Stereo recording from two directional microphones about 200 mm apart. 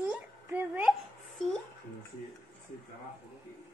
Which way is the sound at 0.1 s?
10° right (ahead or behind).